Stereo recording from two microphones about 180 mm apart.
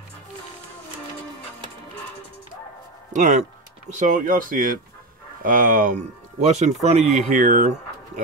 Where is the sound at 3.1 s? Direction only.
40° right (ahead or behind).